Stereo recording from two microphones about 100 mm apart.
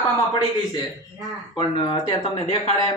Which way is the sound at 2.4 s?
85° left.